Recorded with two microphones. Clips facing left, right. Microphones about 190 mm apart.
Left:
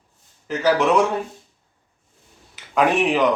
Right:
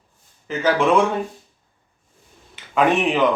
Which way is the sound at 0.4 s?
5° left (ahead or behind).